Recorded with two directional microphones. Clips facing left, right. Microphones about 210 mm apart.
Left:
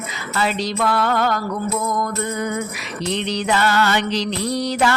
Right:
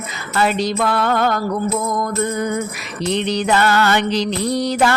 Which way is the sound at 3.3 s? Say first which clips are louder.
Right 3 dB; 55° right (ahead or behind).